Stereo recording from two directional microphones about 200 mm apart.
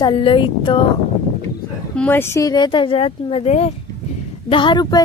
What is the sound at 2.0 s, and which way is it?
Speech, 10° left (ahead or behind).